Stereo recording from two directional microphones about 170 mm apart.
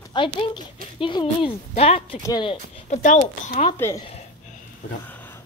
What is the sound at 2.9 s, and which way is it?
Speech, 45° left (ahead or behind).